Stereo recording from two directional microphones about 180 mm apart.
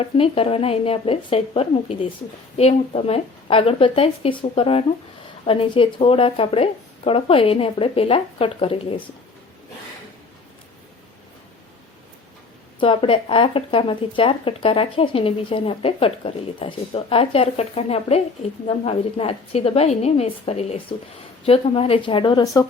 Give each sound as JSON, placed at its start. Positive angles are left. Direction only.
{"t": 0.0, "sound": "speech", "side_deg": 30}
{"t": 12.8, "sound": "speech", "side_deg": 30}